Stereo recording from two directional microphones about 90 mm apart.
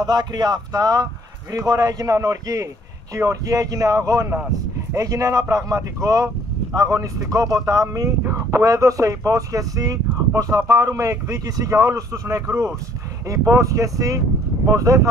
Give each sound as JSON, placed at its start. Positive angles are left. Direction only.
{"t": 0.0, "sound": "speech", "side_deg": -50}